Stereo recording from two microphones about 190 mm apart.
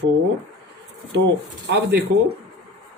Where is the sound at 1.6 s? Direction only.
65° right (ahead or behind).